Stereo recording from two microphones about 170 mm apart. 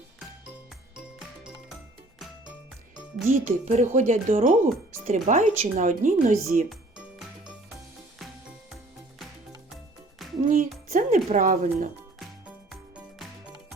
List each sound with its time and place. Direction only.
3.2 s speech: 45° right (ahead or behind)
10.5 s speech: 55° right (ahead or behind)